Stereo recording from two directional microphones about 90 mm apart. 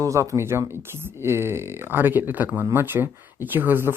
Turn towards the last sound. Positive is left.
turn(degrees=-25)  # may be behind; listen again after turning